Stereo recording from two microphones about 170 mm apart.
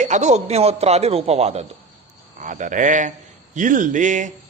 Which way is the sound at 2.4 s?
50° right (ahead or behind).